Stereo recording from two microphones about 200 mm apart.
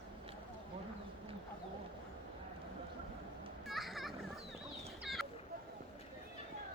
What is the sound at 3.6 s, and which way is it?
Children playing, centre (ahead or behind).